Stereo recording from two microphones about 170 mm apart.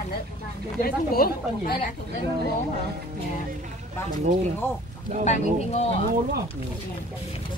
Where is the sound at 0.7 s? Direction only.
60° left (ahead or behind).